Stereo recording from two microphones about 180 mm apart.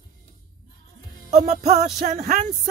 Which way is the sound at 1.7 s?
40° right (ahead or behind).